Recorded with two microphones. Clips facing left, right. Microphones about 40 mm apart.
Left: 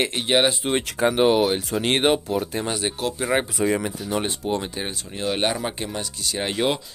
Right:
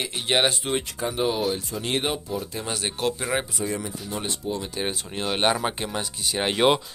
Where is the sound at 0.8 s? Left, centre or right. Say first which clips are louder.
Left 8 dB; left.